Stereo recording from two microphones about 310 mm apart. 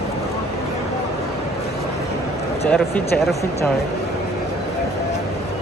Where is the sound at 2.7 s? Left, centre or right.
Centre.